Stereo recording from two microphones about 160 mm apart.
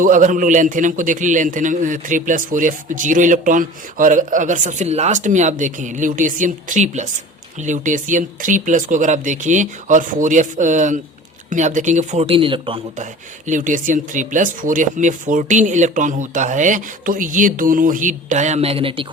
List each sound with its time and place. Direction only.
0.0 s a man's voice: 55° right (ahead or behind); by 12.8 s 35° right (ahead or behind)
13.5 s a man's voice: 55° right (ahead or behind); by 19.0 s 35° right (ahead or behind)